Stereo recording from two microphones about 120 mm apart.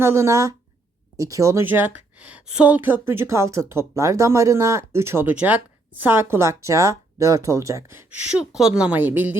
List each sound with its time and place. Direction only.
0.0 s a woman's voice: 25° right (ahead or behind)
8.3 s speech: 5° right (ahead or behind)